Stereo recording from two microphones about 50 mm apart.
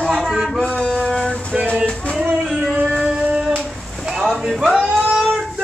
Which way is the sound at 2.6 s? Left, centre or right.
Right.